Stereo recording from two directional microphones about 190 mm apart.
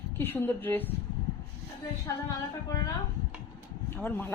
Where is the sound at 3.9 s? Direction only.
10° left (ahead or behind).